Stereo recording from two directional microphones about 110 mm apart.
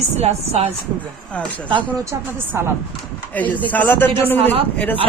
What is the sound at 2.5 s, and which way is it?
Speech, 20° right (ahead or behind).